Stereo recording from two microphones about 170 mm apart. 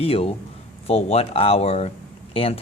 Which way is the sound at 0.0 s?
35° left (ahead or behind).